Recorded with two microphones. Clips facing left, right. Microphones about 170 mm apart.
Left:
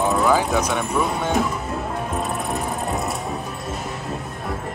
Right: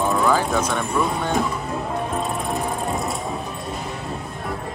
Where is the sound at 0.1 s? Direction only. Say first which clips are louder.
Left 1 dB; 5° left (ahead or behind).